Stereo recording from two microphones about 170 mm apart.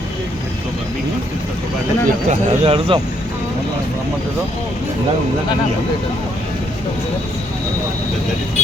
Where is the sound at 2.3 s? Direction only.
35° right (ahead or behind).